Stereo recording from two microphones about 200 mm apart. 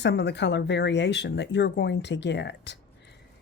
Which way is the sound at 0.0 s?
55° left (ahead or behind).